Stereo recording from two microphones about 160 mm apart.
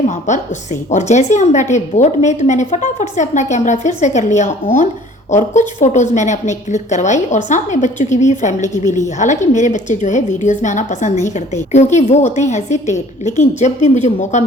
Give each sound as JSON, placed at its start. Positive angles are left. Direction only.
{"t": 0.1, "sound": "a woman's voice", "side_deg": 50}